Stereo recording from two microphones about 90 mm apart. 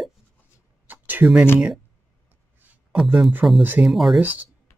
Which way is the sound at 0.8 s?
20° right (ahead or behind).